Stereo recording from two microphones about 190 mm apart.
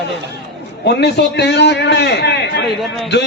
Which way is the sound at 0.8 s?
60° left (ahead or behind).